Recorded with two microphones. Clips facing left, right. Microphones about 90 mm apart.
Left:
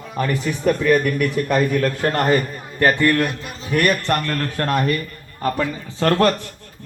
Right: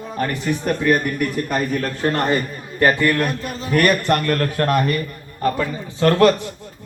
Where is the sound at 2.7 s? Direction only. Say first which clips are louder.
Even; 20° right (ahead or behind).